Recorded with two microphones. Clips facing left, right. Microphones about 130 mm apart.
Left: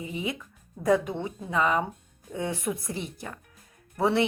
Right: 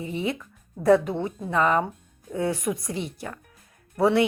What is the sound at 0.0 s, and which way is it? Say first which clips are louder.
Speech: right 4 dB; 40° right (ahead or behind).